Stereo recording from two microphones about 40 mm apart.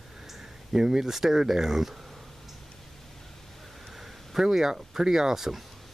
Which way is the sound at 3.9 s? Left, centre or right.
Centre.